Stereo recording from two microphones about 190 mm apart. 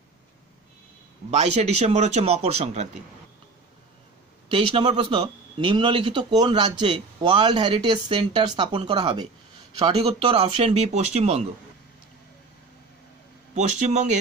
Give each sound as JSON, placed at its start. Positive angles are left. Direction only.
{"t": 1.3, "sound": "a man's voice", "side_deg": -35}
{"t": 4.5, "sound": "a man's voice", "side_deg": -25}
{"t": 13.6, "sound": "a man's voice", "side_deg": -40}